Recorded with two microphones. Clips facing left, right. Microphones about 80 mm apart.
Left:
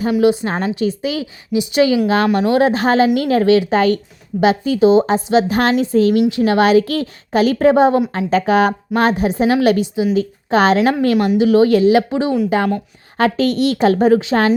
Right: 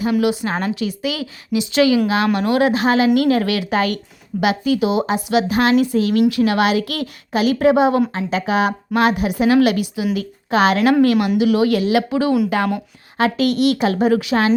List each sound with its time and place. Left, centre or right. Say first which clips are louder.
0.2 s a woman's voice: left 4 dB; left
13.1 s a woman's voice: left 2 dB; left